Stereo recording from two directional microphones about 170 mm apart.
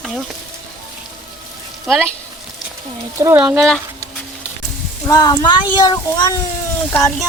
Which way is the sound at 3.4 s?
5° right (ahead or behind).